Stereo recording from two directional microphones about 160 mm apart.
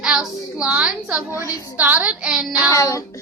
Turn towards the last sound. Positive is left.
turn(degrees=20)  # may be behind; listen again after turning